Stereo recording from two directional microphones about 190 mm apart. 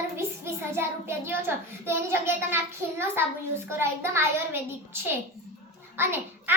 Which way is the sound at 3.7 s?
10° right (ahead or behind).